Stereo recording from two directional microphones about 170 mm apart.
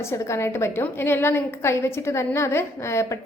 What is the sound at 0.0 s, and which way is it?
A woman's voice, 15° left (ahead or behind).